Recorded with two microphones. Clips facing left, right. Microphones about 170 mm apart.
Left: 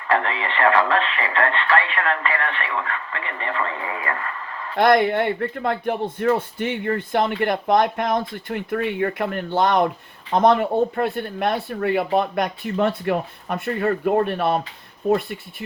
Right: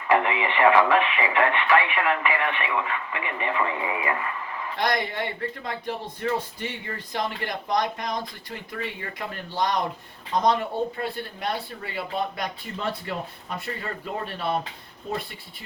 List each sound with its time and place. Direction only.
0.1 s speech: 15° right (ahead or behind)
4.8 s speech: 60° left (ahead or behind)